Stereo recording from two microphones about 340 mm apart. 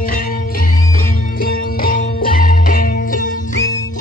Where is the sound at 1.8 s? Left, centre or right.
Left.